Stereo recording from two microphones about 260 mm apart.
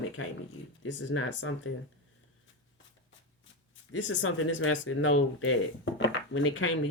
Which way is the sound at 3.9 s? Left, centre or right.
Left.